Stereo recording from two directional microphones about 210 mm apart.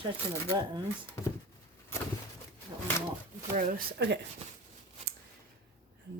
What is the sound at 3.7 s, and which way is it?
Speech, 45° right (ahead or behind).